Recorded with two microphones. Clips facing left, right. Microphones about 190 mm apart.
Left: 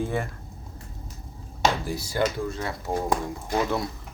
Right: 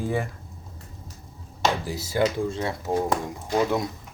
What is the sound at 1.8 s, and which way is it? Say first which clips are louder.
Speech: right 2 dB; 20° right (ahead or behind).